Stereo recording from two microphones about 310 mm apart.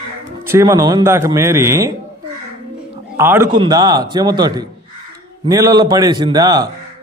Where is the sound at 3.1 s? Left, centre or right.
Centre.